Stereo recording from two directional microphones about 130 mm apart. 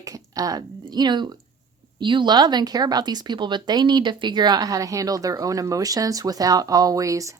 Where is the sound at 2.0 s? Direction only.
35° right (ahead or behind).